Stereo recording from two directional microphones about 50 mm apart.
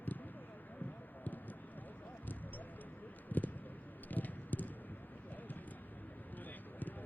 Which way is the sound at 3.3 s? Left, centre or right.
Left.